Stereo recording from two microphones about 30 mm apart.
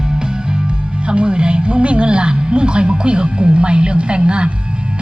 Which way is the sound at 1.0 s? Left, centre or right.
Right.